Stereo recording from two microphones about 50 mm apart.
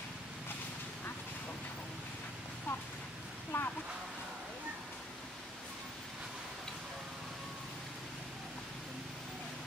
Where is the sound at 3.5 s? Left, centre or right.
Left.